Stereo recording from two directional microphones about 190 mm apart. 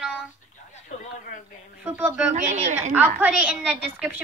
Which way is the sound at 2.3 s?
40° right (ahead or behind).